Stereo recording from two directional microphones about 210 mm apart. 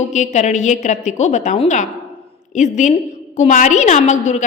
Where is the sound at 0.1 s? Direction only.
35° left (ahead or behind).